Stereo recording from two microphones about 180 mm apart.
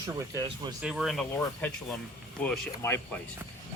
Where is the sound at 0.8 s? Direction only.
5° right (ahead or behind).